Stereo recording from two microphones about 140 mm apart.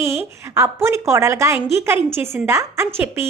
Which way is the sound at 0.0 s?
15° right (ahead or behind).